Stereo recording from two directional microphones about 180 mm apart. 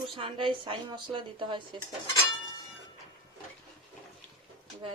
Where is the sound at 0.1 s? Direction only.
30° right (ahead or behind).